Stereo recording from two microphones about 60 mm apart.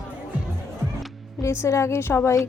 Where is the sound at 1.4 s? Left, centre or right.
Left.